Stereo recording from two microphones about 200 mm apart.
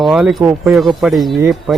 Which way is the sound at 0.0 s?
Centre (ahead or behind).